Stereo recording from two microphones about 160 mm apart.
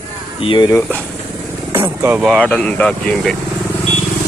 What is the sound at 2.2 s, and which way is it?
Speech, 5° left (ahead or behind).